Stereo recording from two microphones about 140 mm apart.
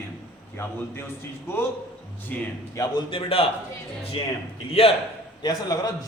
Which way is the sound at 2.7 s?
25° left (ahead or behind).